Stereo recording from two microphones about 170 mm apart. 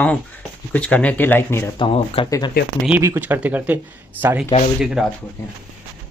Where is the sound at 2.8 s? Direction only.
15° right (ahead or behind).